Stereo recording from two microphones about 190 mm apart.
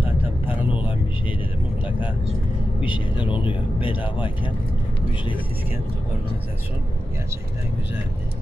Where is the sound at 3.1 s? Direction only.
25° left (ahead or behind).